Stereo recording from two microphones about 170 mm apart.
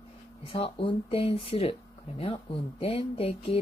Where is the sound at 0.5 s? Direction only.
30° left (ahead or behind).